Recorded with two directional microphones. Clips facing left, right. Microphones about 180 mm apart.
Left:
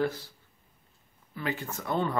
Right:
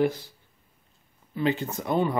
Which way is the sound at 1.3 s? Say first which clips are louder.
Right 8 dB; 20° right (ahead or behind).